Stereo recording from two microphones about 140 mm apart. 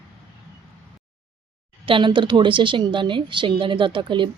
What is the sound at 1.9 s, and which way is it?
A woman's voice, 35° right (ahead or behind).